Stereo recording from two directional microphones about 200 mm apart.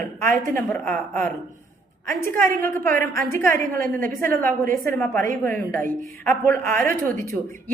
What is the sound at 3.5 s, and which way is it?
Speech, 45° right (ahead or behind).